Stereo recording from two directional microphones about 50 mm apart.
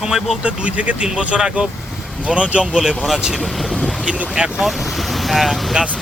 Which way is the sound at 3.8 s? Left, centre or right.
Right.